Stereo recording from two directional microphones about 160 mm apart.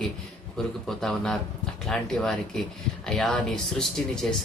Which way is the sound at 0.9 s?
5° left (ahead or behind).